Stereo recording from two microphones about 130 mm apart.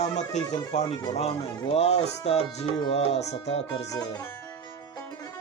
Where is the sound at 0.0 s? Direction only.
60° left (ahead or behind).